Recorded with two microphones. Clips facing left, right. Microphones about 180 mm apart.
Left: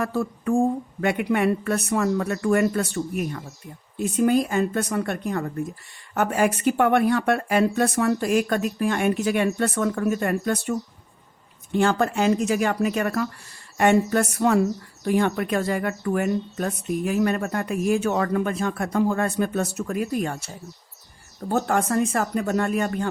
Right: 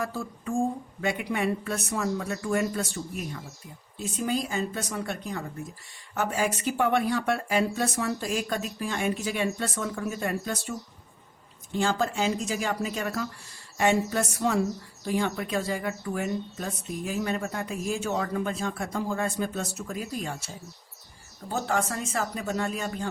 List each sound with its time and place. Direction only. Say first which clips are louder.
0.0 s speech: left 7 dB; 60° left (ahead or behind)
21.5 s speech: left 6 dB; 55° left (ahead or behind)